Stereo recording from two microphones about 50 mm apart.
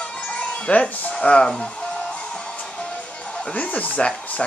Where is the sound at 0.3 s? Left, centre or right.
Left.